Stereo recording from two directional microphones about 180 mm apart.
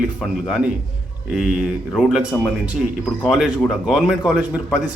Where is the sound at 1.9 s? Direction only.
Centre (ahead or behind).